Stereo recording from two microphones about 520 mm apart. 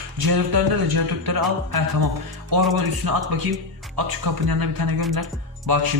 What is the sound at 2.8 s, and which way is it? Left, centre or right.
Speech, right.